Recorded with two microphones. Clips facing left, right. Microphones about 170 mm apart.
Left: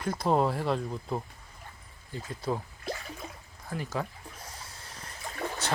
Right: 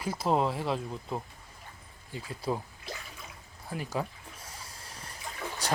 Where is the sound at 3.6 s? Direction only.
10° right (ahead or behind).